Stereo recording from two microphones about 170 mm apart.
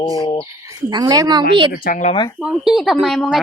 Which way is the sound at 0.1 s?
25° left (ahead or behind).